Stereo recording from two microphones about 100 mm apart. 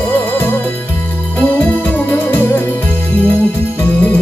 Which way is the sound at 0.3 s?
20° left (ahead or behind).